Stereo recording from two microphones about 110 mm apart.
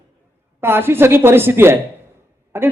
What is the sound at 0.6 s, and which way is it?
Speech, 20° right (ahead or behind).